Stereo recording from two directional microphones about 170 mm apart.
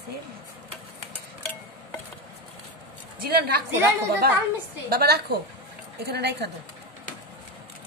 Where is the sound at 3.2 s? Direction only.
65° right (ahead or behind).